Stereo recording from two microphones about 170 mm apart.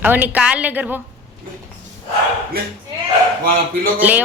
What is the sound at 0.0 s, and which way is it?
A woman's voice, 10° right (ahead or behind).